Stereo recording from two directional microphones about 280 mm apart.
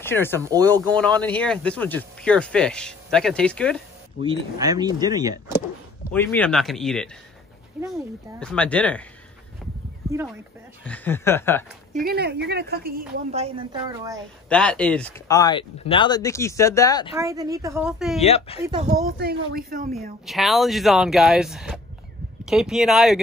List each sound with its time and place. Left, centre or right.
0.0 s speech: centre
0.4 s speech: centre
0.8 s speech: centre
4.2 s speech: centre
6.1 s speech: centre
10.9 s speech: centre
11.9 s a woman's voice: right
13.3 s speech: right
14.5 s speech: centre
17.1 s speech: centre
18.2 s speech: left
18.6 s speech: centre
19.0 s a woman's voice: right
20.2 s speech: centre